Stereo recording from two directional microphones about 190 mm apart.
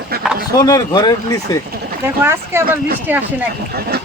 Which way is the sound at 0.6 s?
20° left (ahead or behind).